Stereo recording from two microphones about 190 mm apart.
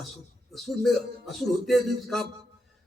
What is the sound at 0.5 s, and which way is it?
A man's voice, centre (ahead or behind).